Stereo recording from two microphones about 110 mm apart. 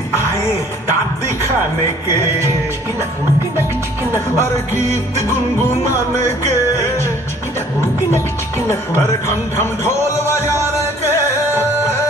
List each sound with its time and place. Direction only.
4.4 s music: 25° left (ahead or behind)